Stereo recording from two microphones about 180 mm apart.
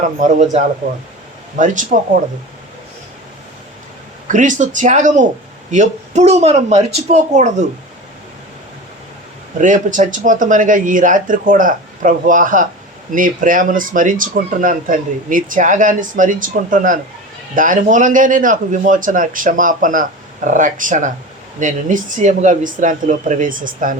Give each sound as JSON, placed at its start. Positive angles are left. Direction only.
{"t": 0.2, "sound": "speech", "side_deg": -45}
{"t": 1.5, "sound": "speech", "side_deg": -45}
{"t": 4.3, "sound": "speech", "side_deg": -45}
{"t": 9.6, "sound": "speech", "side_deg": -45}